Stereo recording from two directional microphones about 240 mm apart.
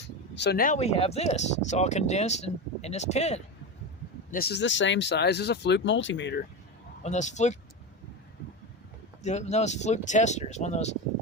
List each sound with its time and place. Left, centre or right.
0.3 s speech: left
4.3 s speech: left
7.0 s speech: left
9.2 s speech: left